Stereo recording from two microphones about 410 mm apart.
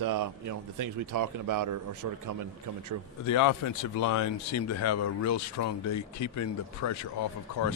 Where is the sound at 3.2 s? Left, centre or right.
Left.